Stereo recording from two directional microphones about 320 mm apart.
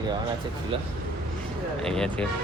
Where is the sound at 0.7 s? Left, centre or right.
Centre.